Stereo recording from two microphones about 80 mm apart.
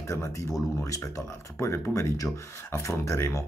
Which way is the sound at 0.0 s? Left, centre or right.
Left.